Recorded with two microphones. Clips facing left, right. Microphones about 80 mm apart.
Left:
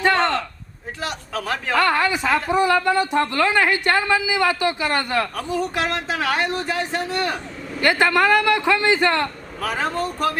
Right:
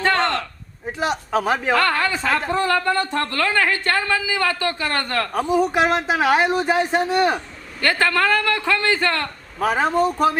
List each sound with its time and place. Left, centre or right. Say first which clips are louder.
0.2 s a sound: left 1 dB; centre
0.9 s speech: right 7 dB; right
1.7 s speech: left 4 dB; centre
5.3 s speech: right 5 dB; centre
7.8 s a man's voice: left 2 dB; centre
9.6 s speech: right 5 dB; right